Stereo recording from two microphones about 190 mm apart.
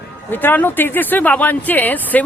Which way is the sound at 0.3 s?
10° left (ahead or behind).